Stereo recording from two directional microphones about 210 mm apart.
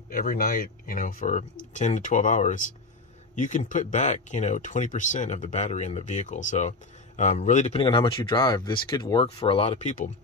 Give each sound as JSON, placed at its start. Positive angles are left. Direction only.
{"t": 0.1, "sound": "speech", "side_deg": 40}